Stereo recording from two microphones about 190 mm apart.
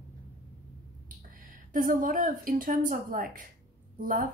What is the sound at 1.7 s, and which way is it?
A woman's voice, 45° right (ahead or behind).